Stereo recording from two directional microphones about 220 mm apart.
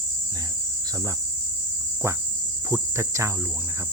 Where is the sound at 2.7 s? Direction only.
15° right (ahead or behind).